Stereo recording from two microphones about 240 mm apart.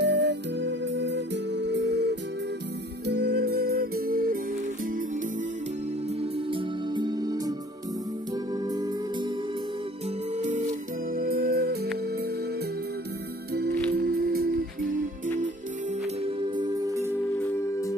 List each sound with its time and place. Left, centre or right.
0.0 s music: right
6.3 s music: right
8.6 s music: centre
10.3 s music: right
13.5 s music: right
16.2 s music: right
17.4 s music: centre